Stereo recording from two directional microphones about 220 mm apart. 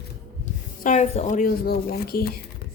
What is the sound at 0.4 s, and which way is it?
Speech, 35° left (ahead or behind).